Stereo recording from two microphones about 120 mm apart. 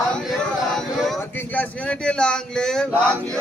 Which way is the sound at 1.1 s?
15° left (ahead or behind).